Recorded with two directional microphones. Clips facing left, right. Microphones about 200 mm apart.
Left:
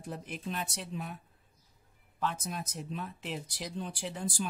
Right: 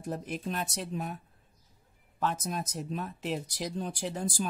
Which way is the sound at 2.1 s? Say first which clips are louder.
Right 3 dB; 40° right (ahead or behind).